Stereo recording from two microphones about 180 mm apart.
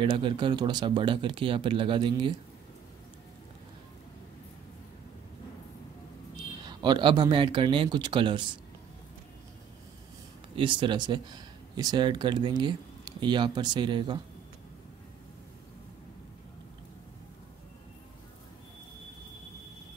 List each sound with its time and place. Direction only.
0.0 s speech: 25° right (ahead or behind)
6.6 s speech: 25° right (ahead or behind)
10.5 s speech: 25° right (ahead or behind)